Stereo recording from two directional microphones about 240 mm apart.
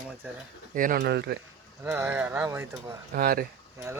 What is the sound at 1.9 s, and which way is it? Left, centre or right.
Speech, centre.